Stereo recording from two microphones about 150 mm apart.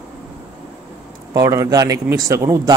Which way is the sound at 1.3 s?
20° right (ahead or behind).